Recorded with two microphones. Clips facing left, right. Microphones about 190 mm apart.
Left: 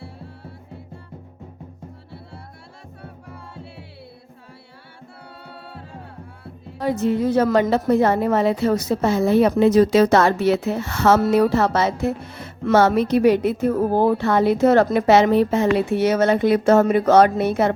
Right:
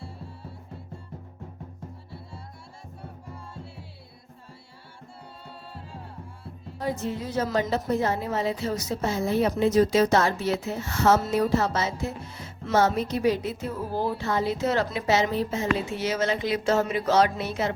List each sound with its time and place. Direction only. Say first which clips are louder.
3.0 s music: left 3 dB; 65° left (ahead or behind)
5.5 s music: left 4 dB; 65° left (ahead or behind)